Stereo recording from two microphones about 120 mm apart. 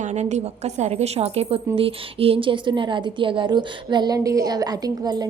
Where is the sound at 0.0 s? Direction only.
75° right (ahead or behind).